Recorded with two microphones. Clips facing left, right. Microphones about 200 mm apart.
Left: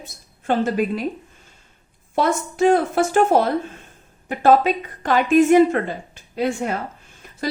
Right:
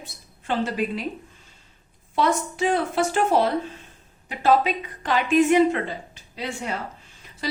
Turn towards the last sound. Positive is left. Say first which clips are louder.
# left 8 dB
turn(degrees=50)  # may be behind; listen again after turning